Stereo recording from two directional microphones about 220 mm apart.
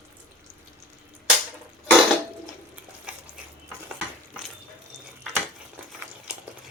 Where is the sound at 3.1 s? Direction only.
5° right (ahead or behind).